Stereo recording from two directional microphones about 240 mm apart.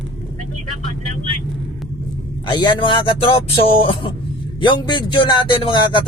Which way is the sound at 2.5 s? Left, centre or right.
Centre.